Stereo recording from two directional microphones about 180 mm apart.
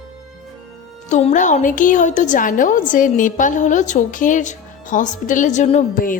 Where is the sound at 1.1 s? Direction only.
45° left (ahead or behind).